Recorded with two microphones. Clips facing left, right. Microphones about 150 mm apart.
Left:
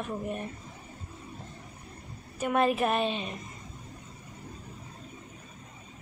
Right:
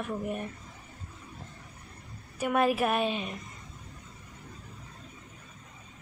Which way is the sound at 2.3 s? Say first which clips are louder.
Even; 10° right (ahead or behind).